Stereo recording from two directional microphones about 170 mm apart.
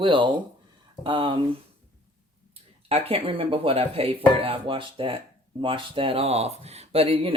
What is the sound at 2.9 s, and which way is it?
Speech, 35° right (ahead or behind).